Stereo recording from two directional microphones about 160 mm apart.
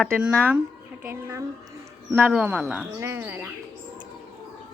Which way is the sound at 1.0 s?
15° right (ahead or behind).